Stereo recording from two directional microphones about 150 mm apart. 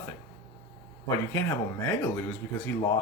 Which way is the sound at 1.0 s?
20° left (ahead or behind).